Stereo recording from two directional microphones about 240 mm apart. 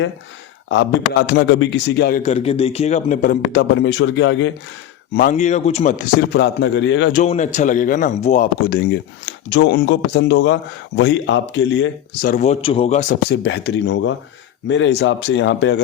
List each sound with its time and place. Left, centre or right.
1.3 s speech: left
5.1 s speech: left
7.1 s speech: left
12.3 s speech: left